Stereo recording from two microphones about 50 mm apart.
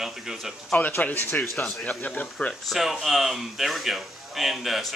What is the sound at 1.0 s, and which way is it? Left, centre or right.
Speech, left.